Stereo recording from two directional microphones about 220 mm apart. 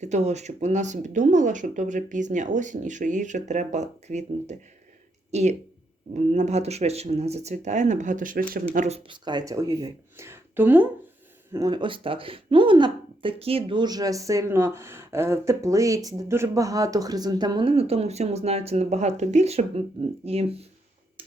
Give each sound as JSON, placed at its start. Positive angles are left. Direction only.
{"t": 0.0, "sound": "speech", "side_deg": -30}
{"t": 9.0, "sound": "speech", "side_deg": -20}